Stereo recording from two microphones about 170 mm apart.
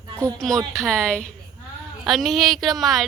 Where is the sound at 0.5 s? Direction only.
20° right (ahead or behind).